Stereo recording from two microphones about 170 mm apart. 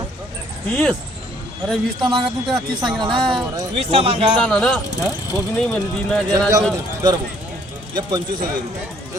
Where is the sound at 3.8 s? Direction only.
35° right (ahead or behind).